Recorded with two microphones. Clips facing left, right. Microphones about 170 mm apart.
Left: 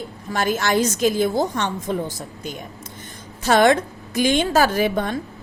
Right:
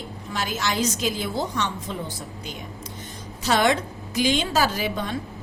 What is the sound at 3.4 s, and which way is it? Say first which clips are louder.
A woman's voice: left 5 dB; 50° left (ahead or behind).